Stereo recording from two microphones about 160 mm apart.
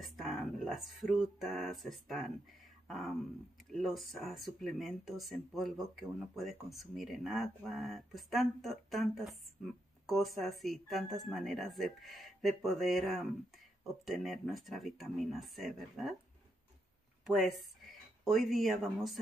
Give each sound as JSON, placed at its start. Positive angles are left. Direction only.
{"t": 0.0, "sound": "speech", "side_deg": 0}
{"t": 3.7, "sound": "speech", "side_deg": 0}
{"t": 17.3, "sound": "speech", "side_deg": 0}